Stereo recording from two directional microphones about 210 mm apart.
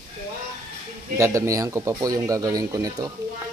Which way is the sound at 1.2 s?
15° right (ahead or behind).